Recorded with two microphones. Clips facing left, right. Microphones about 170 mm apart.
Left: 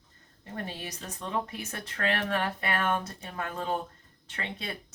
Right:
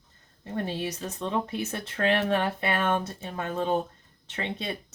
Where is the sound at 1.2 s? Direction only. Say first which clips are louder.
Right 4 dB; 25° right (ahead or behind).